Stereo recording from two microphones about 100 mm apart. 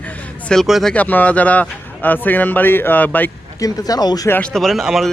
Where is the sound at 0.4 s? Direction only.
5° left (ahead or behind).